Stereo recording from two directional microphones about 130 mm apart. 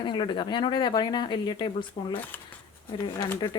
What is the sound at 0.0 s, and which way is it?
A woman's voice, 40° left (ahead or behind).